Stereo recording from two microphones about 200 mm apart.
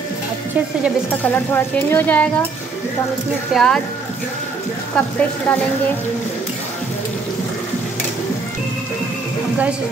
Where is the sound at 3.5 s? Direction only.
5° left (ahead or behind).